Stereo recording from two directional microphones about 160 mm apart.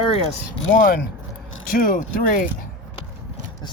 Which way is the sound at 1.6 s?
60° left (ahead or behind).